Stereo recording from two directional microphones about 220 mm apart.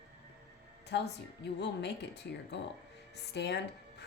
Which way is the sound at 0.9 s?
50° left (ahead or behind).